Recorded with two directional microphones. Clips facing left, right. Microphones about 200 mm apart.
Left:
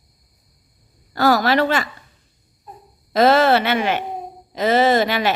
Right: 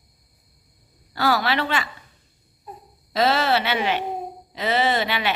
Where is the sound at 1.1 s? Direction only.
45° left (ahead or behind).